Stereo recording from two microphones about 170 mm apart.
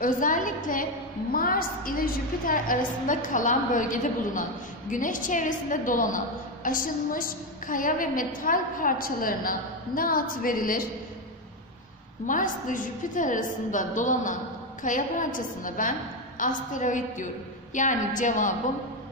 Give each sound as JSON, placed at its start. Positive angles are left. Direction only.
{"t": 0.0, "sound": "a woman's voice", "side_deg": 50}
{"t": 12.3, "sound": "a woman's voice", "side_deg": 50}